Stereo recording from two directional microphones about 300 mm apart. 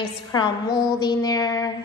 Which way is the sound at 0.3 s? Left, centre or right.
Centre.